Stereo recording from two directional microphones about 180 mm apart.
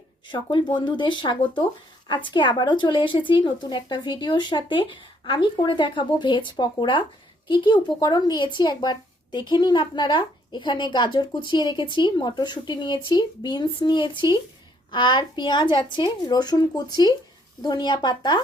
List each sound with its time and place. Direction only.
0.3 s a woman's voice: 25° left (ahead or behind)